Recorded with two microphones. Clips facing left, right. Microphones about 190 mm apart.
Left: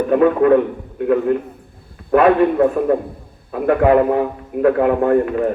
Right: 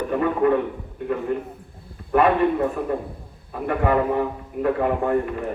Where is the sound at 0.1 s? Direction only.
90° left.